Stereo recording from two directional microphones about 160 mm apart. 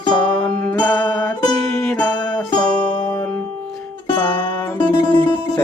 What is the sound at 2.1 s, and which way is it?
Music, 25° left (ahead or behind).